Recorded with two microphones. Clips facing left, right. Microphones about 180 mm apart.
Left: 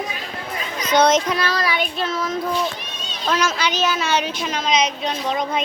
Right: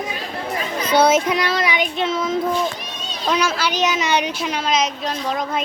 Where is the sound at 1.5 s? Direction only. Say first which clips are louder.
Right 2 dB; 20° right (ahead or behind).